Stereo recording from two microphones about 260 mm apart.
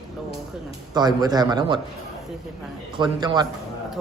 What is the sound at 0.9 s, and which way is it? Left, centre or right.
Speech, centre.